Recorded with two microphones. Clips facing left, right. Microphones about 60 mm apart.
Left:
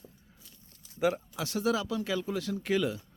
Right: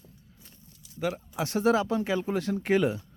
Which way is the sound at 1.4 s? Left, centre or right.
Right.